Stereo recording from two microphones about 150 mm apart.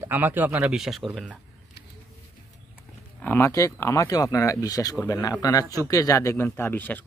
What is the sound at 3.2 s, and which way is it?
Speech, 20° left (ahead or behind).